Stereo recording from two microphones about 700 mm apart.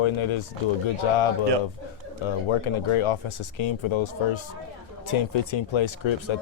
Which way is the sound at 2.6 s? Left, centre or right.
Left.